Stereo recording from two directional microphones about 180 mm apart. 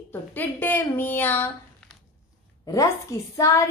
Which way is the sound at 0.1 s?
10° left (ahead or behind).